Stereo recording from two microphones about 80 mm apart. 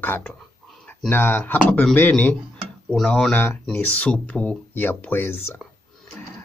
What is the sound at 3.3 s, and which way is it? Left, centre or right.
Speech, left.